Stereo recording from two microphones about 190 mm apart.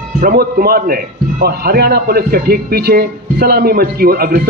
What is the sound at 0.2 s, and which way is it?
A man's voice, 50° right (ahead or behind).